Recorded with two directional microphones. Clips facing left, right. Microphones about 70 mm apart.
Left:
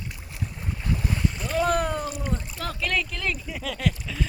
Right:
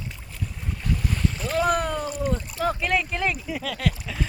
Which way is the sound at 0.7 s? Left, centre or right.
Centre.